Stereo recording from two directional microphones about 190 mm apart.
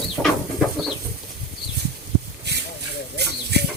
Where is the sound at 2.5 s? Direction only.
65° right (ahead or behind).